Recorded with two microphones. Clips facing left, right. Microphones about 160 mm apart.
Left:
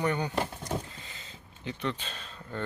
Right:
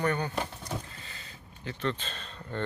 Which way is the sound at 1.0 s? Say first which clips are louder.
Even; 20° left (ahead or behind).